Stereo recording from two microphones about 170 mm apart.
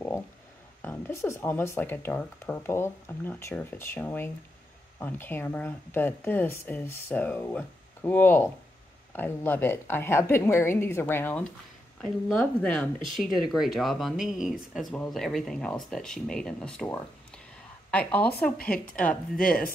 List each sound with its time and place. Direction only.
0.8 s speech: 10° left (ahead or behind)
17.9 s speech: 10° left (ahead or behind)
19.4 s chopping: 55° left (ahead or behind)